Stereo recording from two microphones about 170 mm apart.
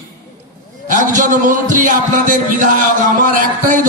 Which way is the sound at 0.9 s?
50° right (ahead or behind).